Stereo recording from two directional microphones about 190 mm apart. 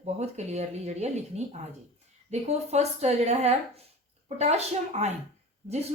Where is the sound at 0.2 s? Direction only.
35° right (ahead or behind).